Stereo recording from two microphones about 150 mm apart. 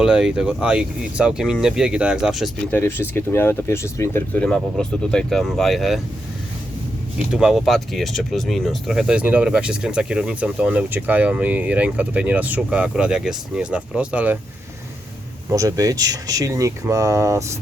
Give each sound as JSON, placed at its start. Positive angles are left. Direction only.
{"t": 0.0, "sound": "speech", "side_deg": -5}
{"t": 2.6, "sound": "speech", "side_deg": 15}
{"t": 7.3, "sound": "speech", "side_deg": -5}
{"t": 15.4, "sound": "speech", "side_deg": -25}